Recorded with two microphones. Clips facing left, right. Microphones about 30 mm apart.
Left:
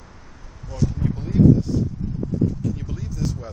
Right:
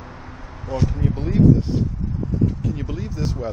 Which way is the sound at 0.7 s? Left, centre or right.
Right.